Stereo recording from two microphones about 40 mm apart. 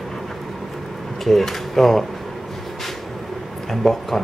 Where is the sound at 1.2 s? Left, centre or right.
Centre.